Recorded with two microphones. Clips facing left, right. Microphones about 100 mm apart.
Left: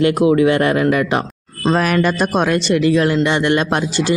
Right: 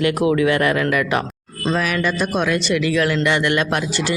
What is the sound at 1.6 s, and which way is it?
Speech, 45° left (ahead or behind).